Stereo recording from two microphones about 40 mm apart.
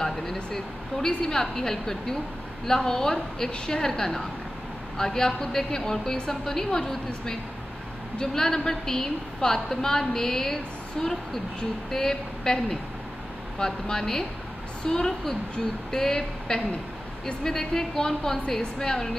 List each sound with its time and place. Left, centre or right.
0.0 s a woman's voice: centre